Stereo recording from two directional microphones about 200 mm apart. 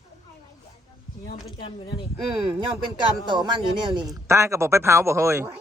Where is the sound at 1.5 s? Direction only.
25° left (ahead or behind).